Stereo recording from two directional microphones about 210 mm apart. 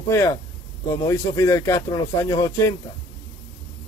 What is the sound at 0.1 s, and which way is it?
A man's voice, 15° left (ahead or behind).